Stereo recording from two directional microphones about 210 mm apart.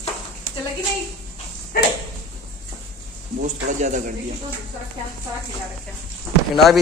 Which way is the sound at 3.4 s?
35° right (ahead or behind).